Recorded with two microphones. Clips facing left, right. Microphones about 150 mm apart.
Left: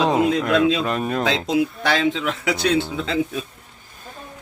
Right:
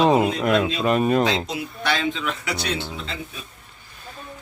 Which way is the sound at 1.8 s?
90° left.